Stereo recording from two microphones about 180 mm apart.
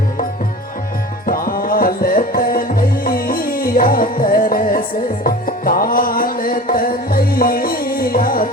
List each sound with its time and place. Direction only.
1.3 s music: 50° left (ahead or behind)